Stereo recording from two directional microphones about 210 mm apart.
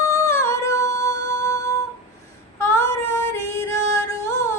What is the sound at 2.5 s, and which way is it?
Female singing, 15° left (ahead or behind).